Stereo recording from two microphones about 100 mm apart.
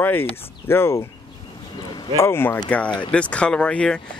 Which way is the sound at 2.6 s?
15° left (ahead or behind).